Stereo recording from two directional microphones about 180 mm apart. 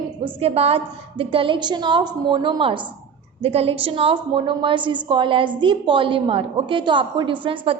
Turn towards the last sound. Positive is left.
turn(degrees=-30)  # may be behind; listen again after turning